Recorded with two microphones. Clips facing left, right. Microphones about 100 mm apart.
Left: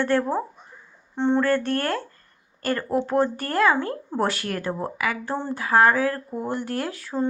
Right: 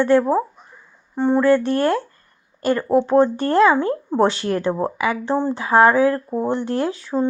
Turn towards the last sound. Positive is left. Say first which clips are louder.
# right 6 dB
turn(degrees=-20)  # may be behind; listen again after turning